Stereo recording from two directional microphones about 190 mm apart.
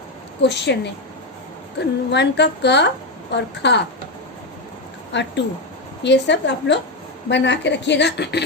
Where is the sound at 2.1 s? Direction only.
65° left (ahead or behind).